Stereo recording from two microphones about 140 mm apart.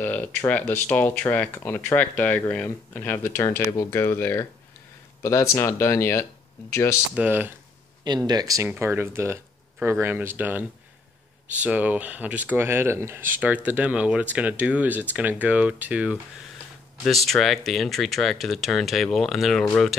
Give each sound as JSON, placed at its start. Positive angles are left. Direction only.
{"t": 0.0, "sound": "speech", "side_deg": 15}
{"t": 7.2, "sound": "speech", "side_deg": -15}
{"t": 8.3, "sound": "speech", "side_deg": -25}
{"t": 17.0, "sound": "speech", "side_deg": 0}